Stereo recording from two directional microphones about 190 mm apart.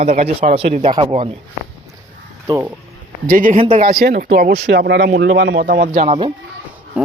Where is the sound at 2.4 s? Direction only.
15° right (ahead or behind).